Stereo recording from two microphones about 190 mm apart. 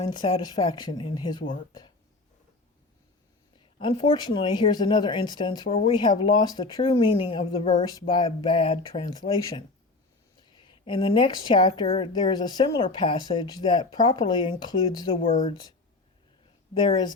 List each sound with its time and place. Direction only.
0.0 s speech: 25° left (ahead or behind)
3.8 s speech: 25° left (ahead or behind)
15.3 s speech: 40° left (ahead or behind)